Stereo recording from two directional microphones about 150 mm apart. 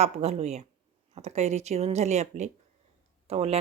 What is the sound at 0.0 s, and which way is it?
A woman's voice, 45° right (ahead or behind).